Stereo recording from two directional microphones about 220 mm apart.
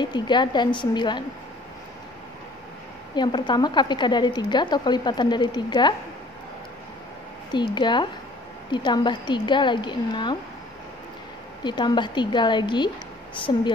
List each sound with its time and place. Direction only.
0.0 s a woman's voice: 20° left (ahead or behind)
3.2 s a woman's voice: 20° left (ahead or behind)
7.5 s a woman's voice: 20° left (ahead or behind)
11.6 s a woman's voice: 20° left (ahead or behind)